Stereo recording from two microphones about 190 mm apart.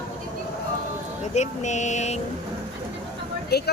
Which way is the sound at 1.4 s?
40° left (ahead or behind).